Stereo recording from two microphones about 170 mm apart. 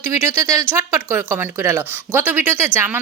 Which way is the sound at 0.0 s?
15° right (ahead or behind).